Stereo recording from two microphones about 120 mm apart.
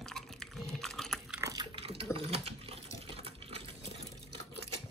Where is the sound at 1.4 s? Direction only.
30° right (ahead or behind).